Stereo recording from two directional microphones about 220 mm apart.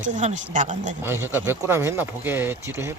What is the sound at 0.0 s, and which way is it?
Speech, 35° right (ahead or behind).